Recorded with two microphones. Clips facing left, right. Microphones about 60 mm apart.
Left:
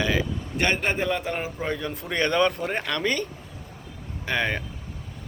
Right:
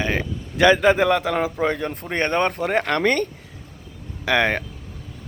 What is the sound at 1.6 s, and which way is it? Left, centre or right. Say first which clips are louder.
Speech: right 6 dB; right.